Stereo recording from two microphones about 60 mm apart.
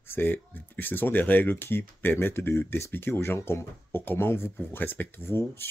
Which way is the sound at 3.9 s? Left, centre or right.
Left.